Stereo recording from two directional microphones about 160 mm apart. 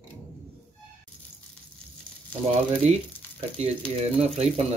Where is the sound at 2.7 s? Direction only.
45° right (ahead or behind).